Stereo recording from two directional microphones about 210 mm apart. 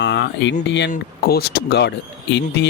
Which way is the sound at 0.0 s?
55° left (ahead or behind).